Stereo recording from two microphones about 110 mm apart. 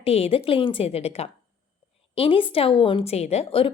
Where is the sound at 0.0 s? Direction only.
60° left (ahead or behind).